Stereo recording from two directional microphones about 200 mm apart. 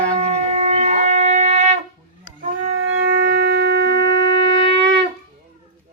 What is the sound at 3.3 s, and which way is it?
Shofar, 55° right (ahead or behind).